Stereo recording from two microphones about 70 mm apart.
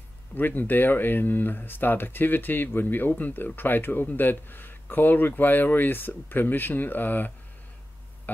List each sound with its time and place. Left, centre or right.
0.3 s speech: left